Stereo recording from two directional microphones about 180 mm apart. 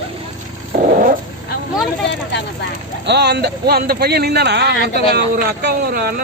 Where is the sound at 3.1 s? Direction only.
65° right (ahead or behind).